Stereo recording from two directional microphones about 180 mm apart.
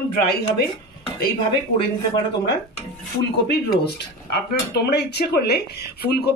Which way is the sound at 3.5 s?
65° left (ahead or behind).